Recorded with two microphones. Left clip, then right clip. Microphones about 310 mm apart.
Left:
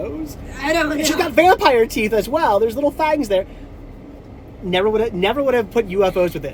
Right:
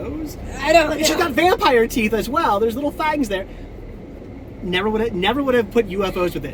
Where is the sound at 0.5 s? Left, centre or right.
Centre.